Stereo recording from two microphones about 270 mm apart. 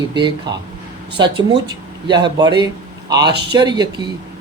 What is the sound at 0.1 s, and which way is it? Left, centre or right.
Speech, centre.